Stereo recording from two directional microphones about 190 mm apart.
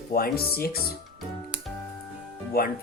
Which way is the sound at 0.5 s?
55° left (ahead or behind).